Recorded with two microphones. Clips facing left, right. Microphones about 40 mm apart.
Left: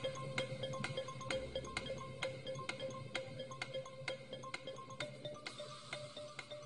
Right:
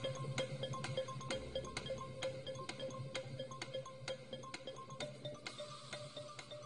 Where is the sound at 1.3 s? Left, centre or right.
Left.